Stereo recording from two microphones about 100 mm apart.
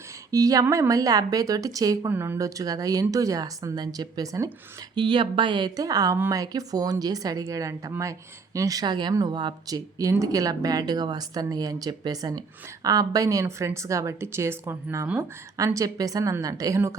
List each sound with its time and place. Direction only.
0.3 s speech: 35° right (ahead or behind)
2.0 s speech: 20° right (ahead or behind)
4.9 s speech: 55° right (ahead or behind)
5.7 s speech: 35° right (ahead or behind); by 15.2 s 20° right (ahead or behind)
15.5 s speech: 35° right (ahead or behind)